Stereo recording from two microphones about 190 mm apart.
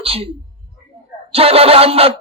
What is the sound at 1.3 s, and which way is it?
Speech, 30° right (ahead or behind).